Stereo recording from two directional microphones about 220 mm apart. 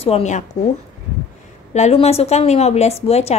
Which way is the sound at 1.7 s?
30° left (ahead or behind).